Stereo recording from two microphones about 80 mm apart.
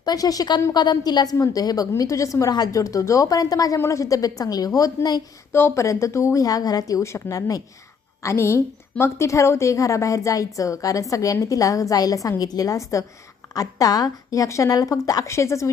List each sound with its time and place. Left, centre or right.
0.0 s a woman's voice: left
1.9 s speech: left
3.8 s speech: left
5.5 s a woman's voice: left